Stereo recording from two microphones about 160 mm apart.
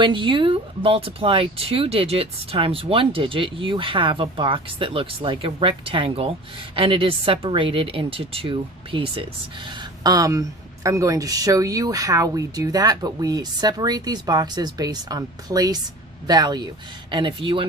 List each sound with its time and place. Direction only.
0.0 s speech: 30° right (ahead or behind)